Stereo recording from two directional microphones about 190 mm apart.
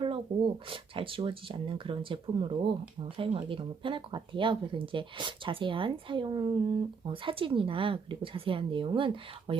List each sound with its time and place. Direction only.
0.0 s speech: 25° right (ahead or behind)